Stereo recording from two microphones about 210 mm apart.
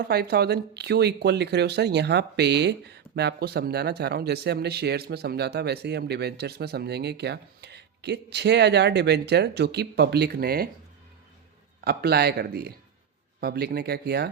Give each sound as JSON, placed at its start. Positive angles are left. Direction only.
{"t": 0.1, "sound": "speech", "side_deg": -50}
{"t": 11.9, "sound": "speech", "side_deg": -50}